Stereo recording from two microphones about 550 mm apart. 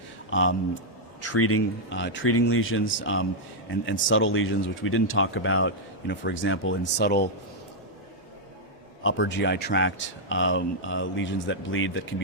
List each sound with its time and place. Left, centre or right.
0.3 s speech: left
9.0 s speech: centre